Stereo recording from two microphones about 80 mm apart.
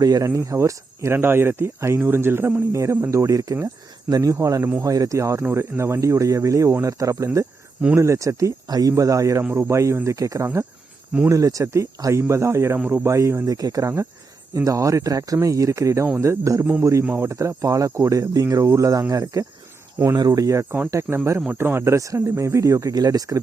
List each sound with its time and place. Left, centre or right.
0.0 s speech: right
0.3 s speech: right
13.6 s speech: right
21.5 s speech: right